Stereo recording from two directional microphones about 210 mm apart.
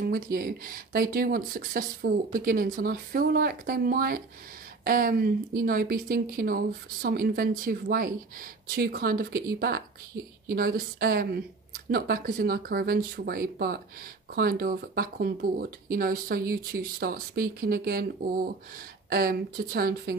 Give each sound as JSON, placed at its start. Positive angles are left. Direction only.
{"t": 0.0, "sound": "speech", "side_deg": -45}